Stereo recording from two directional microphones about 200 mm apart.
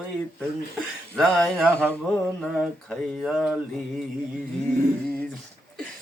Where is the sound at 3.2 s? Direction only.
5° right (ahead or behind).